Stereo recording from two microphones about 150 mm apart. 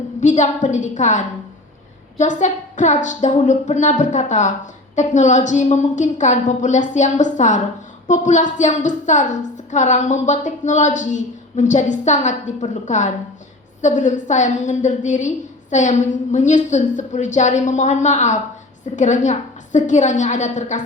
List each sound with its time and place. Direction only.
0.2 s a woman's voice: 55° left (ahead or behind)